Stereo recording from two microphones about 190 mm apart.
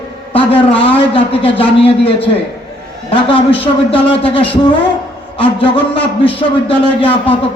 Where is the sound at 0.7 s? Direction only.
30° left (ahead or behind).